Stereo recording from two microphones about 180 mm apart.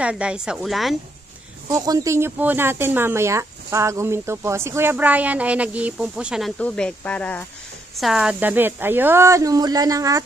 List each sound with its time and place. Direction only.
0.0 s speech: 5° right (ahead or behind)
1.7 s speech: 20° right (ahead or behind)